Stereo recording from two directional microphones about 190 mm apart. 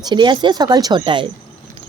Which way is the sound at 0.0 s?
25° right (ahead or behind).